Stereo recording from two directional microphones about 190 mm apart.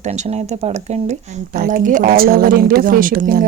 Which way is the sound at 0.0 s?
35° right (ahead or behind).